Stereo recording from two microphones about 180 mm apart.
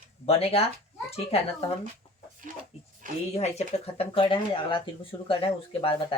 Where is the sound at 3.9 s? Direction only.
30° left (ahead or behind).